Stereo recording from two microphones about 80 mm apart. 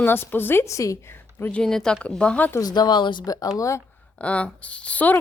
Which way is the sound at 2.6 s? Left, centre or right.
Left.